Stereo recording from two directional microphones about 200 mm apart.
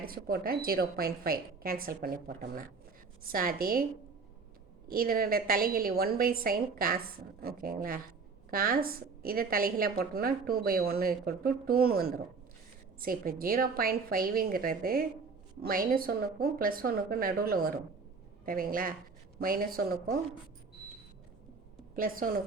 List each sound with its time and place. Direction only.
0.0 s a woman's voice: 50° right (ahead or behind)
4.9 s a woman's voice: 45° right (ahead or behind)
21.9 s a woman's voice: 45° right (ahead or behind)